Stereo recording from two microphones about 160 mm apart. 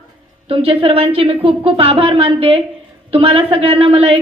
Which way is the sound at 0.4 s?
35° right (ahead or behind).